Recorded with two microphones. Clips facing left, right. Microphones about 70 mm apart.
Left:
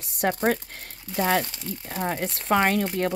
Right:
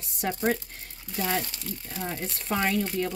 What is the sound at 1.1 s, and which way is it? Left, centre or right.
Speech, left.